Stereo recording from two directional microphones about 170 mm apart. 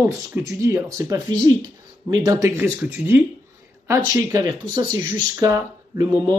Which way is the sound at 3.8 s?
20° right (ahead or behind).